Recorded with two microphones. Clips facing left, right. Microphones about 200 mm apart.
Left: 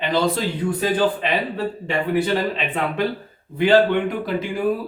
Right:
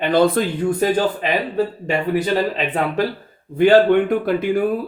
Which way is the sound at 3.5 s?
50° right (ahead or behind).